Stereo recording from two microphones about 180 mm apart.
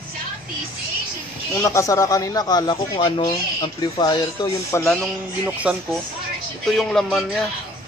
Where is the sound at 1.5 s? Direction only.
15° left (ahead or behind).